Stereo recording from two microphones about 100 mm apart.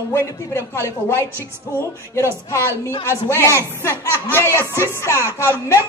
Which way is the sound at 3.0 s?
30° left (ahead or behind).